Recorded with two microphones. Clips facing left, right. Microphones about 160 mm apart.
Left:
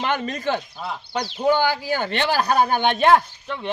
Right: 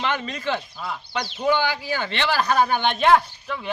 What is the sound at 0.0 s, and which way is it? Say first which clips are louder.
Speech: left 2 dB; 45° left (ahead or behind).